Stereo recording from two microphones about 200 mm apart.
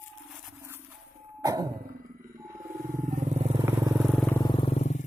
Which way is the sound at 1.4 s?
15° right (ahead or behind).